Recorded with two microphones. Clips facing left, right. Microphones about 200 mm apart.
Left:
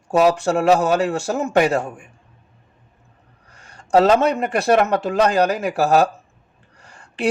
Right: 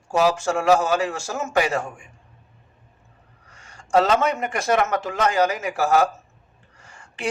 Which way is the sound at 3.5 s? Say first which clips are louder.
Left 4 dB; 35° left (ahead or behind).